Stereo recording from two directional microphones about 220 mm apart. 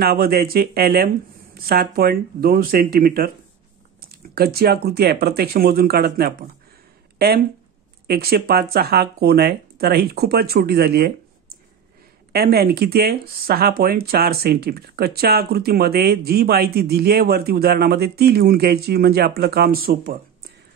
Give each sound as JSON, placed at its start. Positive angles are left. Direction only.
{"t": 0.0, "sound": "speech", "side_deg": -45}
{"t": 4.4, "sound": "speech", "side_deg": -45}